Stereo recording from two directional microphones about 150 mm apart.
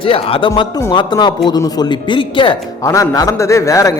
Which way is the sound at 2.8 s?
20° left (ahead or behind).